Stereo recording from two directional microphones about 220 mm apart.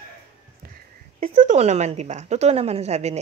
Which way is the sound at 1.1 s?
35° right (ahead or behind).